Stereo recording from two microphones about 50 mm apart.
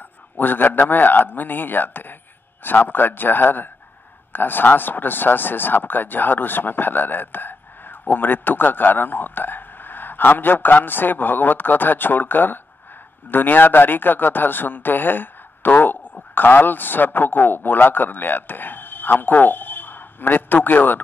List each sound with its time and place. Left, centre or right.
0.4 s a man's voice: left